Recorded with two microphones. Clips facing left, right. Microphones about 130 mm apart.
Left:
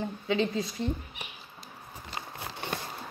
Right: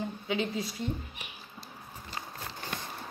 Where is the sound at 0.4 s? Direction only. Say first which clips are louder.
Left 4 dB; 25° left (ahead or behind).